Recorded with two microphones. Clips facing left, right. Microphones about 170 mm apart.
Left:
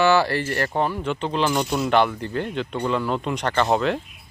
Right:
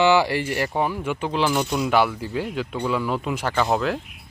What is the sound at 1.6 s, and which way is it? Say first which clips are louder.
Speech: even; 5° left (ahead or behind).